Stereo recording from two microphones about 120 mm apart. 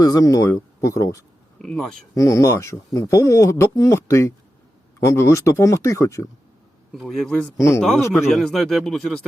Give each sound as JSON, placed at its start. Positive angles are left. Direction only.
{"t": 0.0, "sound": "speech", "side_deg": 30}
{"t": 1.5, "sound": "speech", "side_deg": 5}
{"t": 2.1, "sound": "speech", "side_deg": 25}
{"t": 6.9, "sound": "speech", "side_deg": 0}